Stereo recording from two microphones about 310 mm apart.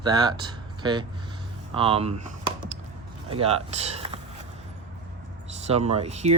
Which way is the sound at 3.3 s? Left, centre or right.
Centre.